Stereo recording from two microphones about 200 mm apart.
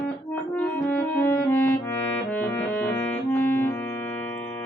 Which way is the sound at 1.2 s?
10° left (ahead or behind).